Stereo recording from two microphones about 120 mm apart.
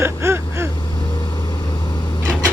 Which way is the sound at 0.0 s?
20° right (ahead or behind).